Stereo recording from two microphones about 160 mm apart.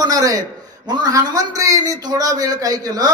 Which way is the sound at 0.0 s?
25° right (ahead or behind).